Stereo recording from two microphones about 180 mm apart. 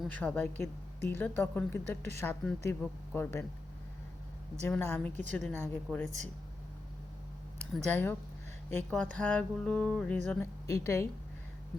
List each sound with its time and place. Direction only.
0.0 s speech: 5° left (ahead or behind)
4.6 s speech: 10° left (ahead or behind)
7.9 s speech: 10° left (ahead or behind)
10.7 s speech: 15° left (ahead or behind)